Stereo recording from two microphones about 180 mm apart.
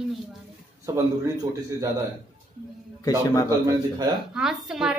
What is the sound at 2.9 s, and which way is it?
Speech, 20° left (ahead or behind).